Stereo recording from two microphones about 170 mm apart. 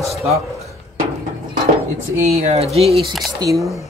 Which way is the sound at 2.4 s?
40° right (ahead or behind).